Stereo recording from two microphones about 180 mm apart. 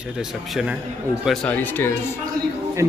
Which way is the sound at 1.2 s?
10° left (ahead or behind).